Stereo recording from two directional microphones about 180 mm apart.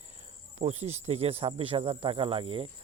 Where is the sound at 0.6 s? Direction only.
35° right (ahead or behind).